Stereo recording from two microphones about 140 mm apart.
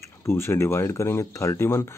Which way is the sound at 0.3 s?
20° left (ahead or behind).